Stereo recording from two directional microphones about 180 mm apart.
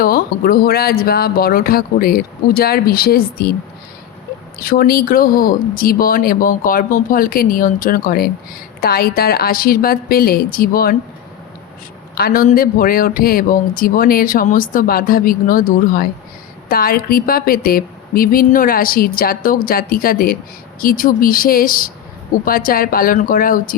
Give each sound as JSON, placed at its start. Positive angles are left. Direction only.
{"t": 0.0, "sound": "speech", "side_deg": 55}
{"t": 4.5, "sound": "a man's voice", "side_deg": 55}
{"t": 12.1, "sound": "a man's voice", "side_deg": 55}